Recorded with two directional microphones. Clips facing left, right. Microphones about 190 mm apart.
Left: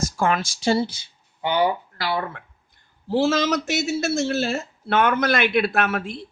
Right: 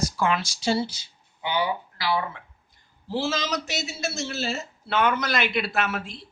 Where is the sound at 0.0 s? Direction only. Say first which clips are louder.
Left 2 dB; 45° left (ahead or behind).